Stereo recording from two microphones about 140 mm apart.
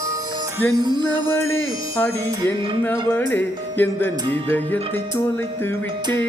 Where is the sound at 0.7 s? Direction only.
30° right (ahead or behind).